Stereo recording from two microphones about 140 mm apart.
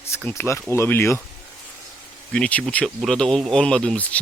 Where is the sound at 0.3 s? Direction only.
20° left (ahead or behind).